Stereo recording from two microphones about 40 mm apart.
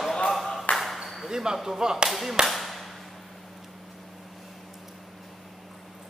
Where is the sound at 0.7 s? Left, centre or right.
Centre.